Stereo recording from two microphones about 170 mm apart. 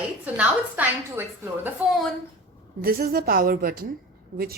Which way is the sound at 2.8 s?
60° right (ahead or behind).